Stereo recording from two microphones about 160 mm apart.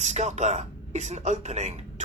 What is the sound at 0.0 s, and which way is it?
Speech, 45° right (ahead or behind).